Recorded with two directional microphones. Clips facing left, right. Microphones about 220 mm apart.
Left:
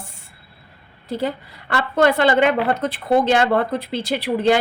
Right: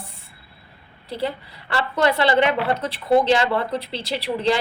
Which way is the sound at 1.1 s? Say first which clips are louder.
Left 3 dB; 45° left (ahead or behind).